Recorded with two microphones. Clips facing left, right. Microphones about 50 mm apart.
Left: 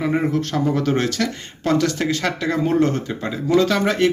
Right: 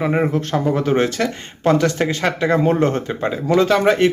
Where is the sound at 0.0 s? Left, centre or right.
Right.